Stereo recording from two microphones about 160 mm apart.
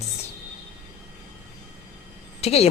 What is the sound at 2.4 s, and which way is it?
Speech, 40° left (ahead or behind).